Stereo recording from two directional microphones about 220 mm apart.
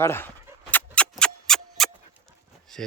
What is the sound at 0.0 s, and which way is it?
Speech, 10° left (ahead or behind).